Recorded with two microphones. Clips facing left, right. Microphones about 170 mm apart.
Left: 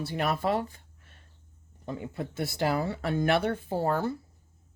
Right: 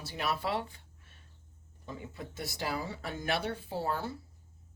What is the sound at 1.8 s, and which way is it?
Speech, 60° left (ahead or behind).